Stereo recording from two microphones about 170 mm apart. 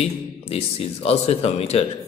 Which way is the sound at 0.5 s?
35° left (ahead or behind).